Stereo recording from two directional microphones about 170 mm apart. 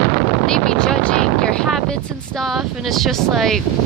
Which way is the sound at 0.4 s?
5° left (ahead or behind).